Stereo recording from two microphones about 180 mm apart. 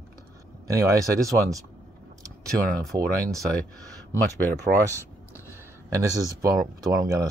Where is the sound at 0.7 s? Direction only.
15° right (ahead or behind).